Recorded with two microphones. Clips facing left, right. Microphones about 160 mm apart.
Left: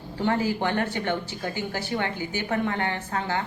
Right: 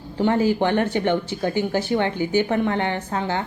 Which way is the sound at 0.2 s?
20° right (ahead or behind).